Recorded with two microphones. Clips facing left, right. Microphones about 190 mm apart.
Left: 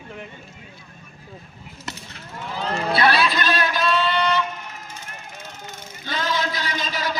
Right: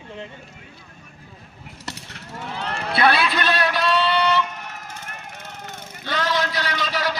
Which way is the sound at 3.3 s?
65° right (ahead or behind).